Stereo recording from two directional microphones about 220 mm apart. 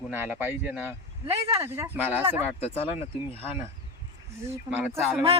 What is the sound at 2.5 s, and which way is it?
Speech, 30° left (ahead or behind).